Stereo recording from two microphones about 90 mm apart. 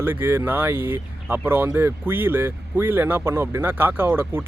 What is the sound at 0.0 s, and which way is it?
Speech, 25° right (ahead or behind).